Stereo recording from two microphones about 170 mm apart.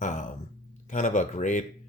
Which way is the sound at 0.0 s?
45° left (ahead or behind).